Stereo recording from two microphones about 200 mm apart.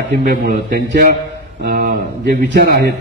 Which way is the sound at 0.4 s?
45° right (ahead or behind).